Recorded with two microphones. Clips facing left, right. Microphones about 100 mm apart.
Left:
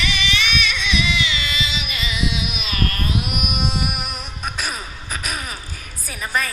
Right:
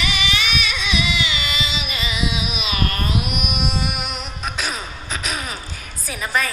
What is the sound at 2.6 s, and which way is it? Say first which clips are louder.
Music: right 1 dB; 10° right (ahead or behind).